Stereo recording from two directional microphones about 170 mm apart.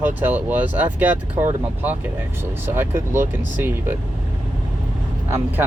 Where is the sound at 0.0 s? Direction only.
10° right (ahead or behind).